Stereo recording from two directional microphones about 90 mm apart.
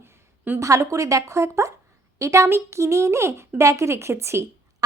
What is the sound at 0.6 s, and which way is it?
Speech, 35° right (ahead or behind).